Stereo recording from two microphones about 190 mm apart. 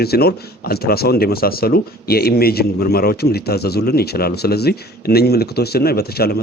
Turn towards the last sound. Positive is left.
turn(degrees=55)  # may be behind; listen again after turning